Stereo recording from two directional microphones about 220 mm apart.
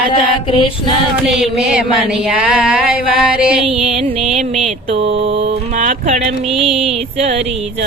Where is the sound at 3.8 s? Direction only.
30° right (ahead or behind).